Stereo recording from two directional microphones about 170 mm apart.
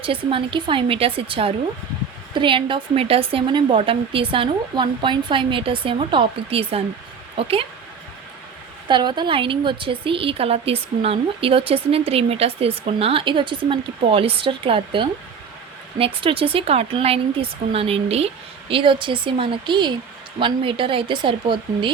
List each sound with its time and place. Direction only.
0.0 s speech: 30° right (ahead or behind)
8.9 s speech: 25° right (ahead or behind)